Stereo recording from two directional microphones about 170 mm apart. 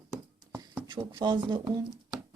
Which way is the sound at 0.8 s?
25° right (ahead or behind).